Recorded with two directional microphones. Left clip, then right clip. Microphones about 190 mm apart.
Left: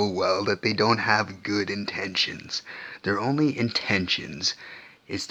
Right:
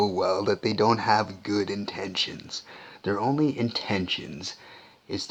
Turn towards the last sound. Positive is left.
turn(degrees=15)  # may be behind; listen again after turning